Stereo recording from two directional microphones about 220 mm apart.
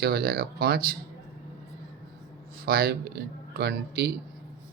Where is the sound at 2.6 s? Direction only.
45° right (ahead or behind).